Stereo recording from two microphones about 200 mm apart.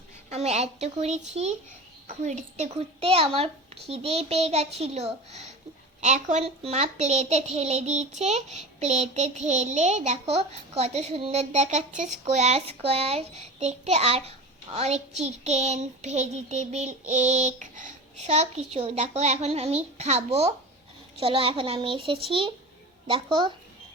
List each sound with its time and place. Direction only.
0.3 s a child's voice: 35° right (ahead or behind)